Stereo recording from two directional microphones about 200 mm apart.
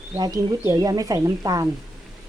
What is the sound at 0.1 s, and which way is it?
Speech, 15° right (ahead or behind).